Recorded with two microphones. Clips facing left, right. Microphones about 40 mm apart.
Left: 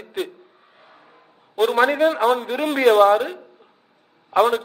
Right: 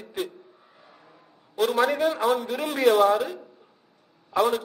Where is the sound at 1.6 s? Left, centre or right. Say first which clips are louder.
Left 5 dB; left.